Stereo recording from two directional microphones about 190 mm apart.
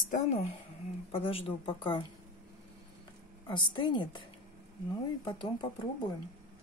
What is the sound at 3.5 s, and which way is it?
Speech, 25° left (ahead or behind).